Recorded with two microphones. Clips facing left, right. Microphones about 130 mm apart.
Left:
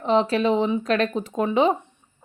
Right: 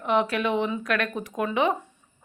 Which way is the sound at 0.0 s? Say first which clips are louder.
Left 4 dB; 30° left (ahead or behind).